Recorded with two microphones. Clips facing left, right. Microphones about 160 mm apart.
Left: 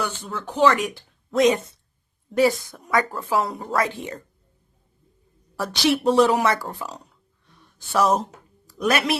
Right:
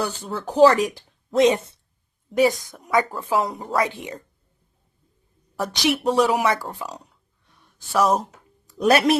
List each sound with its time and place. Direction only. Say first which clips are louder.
0.0 s speech: right 2 dB; 35° right (ahead or behind)
2.4 s a woman's voice: even; 15° right (ahead or behind)
5.7 s a woman's voice: left 2 dB; 15° right (ahead or behind)
8.8 s speech: right 5 dB; 35° right (ahead or behind)